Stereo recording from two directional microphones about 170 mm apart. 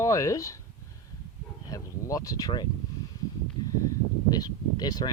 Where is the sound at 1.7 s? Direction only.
20° left (ahead or behind).